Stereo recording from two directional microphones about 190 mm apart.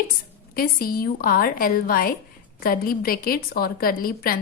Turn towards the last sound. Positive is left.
turn(degrees=50)  # may be behind; listen again after turning